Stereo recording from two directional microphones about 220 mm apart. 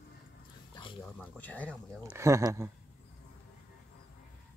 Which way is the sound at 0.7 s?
20° left (ahead or behind).